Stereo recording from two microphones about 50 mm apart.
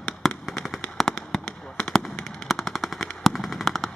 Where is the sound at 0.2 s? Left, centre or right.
Centre.